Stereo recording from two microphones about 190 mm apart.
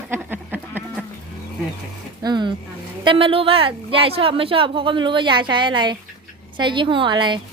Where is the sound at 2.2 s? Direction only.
20° right (ahead or behind).